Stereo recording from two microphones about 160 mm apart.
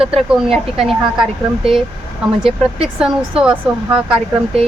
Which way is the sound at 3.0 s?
5° right (ahead or behind).